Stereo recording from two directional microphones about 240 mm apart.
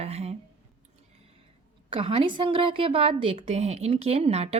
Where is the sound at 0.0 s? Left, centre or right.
Right.